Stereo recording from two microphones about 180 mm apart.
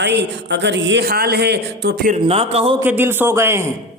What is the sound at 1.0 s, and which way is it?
A man's voice, 55° right (ahead or behind).